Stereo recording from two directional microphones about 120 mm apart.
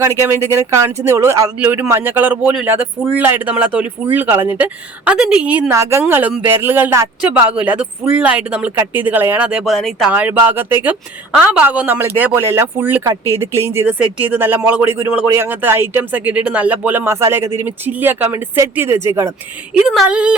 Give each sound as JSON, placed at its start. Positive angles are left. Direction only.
{"t": 0.0, "sound": "speech", "side_deg": -20}
{"t": 5.7, "sound": "a woman's voice", "side_deg": -25}
{"t": 10.1, "sound": "speech", "side_deg": -15}
{"t": 19.8, "sound": "speech", "side_deg": 0}